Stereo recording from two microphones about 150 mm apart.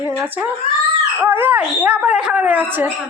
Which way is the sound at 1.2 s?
15° right (ahead or behind).